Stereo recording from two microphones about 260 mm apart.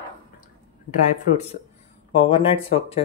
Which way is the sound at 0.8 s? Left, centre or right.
Left.